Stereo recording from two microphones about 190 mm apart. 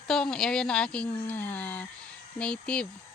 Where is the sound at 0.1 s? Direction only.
5° left (ahead or behind).